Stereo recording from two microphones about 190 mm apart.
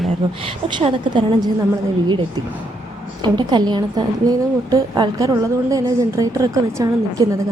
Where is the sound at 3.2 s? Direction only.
25° right (ahead or behind).